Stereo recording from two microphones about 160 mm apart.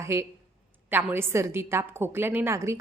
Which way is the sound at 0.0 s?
15° right (ahead or behind).